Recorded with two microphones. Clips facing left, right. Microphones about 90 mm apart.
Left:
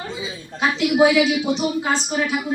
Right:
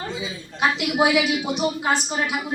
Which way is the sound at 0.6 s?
15° right (ahead or behind).